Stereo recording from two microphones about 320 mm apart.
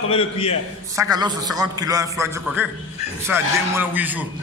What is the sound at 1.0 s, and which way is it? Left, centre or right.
A man's voice, centre.